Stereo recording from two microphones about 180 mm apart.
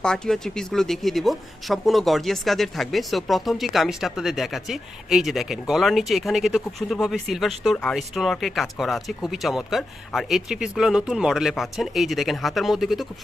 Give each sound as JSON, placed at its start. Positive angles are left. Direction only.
{"t": 0.0, "sound": "speech", "side_deg": 5}